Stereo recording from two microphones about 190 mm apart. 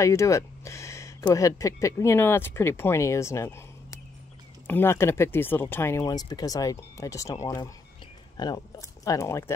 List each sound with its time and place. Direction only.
0.0 s speech: 15° left (ahead or behind)